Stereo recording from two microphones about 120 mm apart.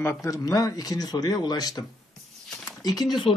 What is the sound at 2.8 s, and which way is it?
Speech, 35° left (ahead or behind).